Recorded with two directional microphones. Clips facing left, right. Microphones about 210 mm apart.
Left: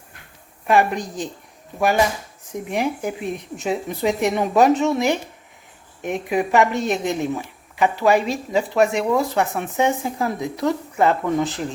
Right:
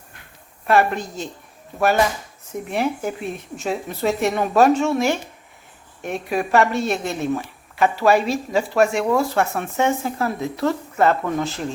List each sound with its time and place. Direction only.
0.7 s a woman's voice: 15° left (ahead or behind)
2.5 s a woman's voice: 15° left (ahead or behind)